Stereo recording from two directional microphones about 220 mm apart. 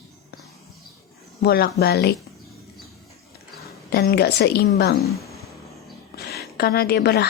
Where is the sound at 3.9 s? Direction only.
45° left (ahead or behind).